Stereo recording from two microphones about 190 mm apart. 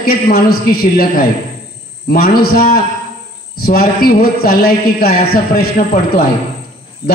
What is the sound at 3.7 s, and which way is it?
A man's voice, 55° left (ahead or behind).